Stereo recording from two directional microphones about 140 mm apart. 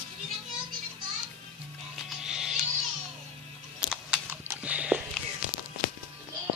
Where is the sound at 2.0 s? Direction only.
5° right (ahead or behind).